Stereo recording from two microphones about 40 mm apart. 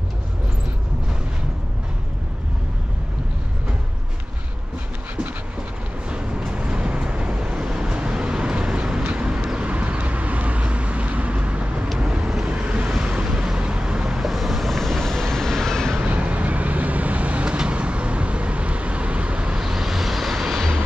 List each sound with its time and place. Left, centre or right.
6.0 s vehicle: right
12.5 s waves: right
12.9 s vehicle: centre
14.1 s vehicle: centre
16.0 s vehicle: right
19.6 s vehicle: centre